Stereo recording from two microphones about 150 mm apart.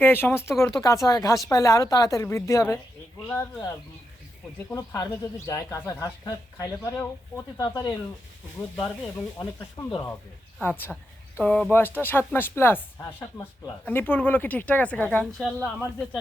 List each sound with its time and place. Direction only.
0.0 s speech: 15° left (ahead or behind)
4.7 s speech: 20° left (ahead or behind)
8.7 s speech: 10° left (ahead or behind)
9.6 s a woman's voice: 20° left (ahead or behind); by 15.7 s centre (ahead or behind)